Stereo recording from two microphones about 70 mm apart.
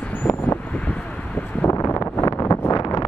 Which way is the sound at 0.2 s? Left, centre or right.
Left.